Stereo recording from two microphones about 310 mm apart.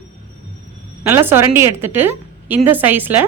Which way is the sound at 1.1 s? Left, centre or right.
Centre.